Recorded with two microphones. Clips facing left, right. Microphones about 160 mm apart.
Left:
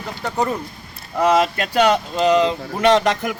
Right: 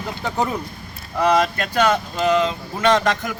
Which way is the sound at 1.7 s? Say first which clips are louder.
Left 3 dB; 15° left (ahead or behind).